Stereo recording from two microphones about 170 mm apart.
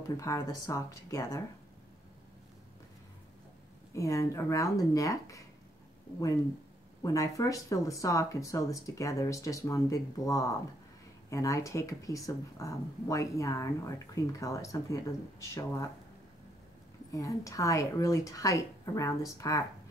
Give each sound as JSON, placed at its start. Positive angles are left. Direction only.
{"t": 0.2, "sound": "speech", "side_deg": 20}
{"t": 3.9, "sound": "speech", "side_deg": 20}
{"t": 7.0, "sound": "speech", "side_deg": 20}
{"t": 17.1, "sound": "speech", "side_deg": 20}